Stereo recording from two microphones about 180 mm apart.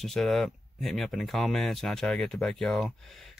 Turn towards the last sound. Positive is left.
turn(degrees=0)  # may be behind; listen again after turning